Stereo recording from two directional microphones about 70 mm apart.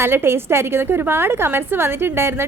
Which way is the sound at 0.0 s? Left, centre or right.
Right.